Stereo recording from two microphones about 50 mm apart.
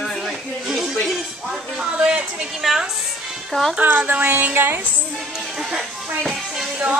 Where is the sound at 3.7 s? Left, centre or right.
Right.